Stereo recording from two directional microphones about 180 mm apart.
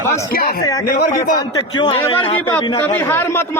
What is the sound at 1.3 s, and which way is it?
A man's voice, 25° left (ahead or behind).